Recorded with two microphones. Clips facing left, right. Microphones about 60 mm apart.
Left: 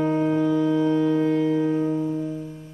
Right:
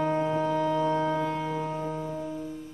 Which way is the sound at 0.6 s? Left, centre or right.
Right.